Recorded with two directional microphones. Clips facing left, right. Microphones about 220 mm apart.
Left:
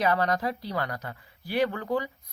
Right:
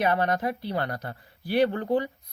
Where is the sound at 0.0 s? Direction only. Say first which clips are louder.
Right 1 dB; 25° right (ahead or behind).